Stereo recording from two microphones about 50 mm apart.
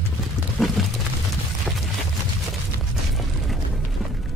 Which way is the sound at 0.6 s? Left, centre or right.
Centre.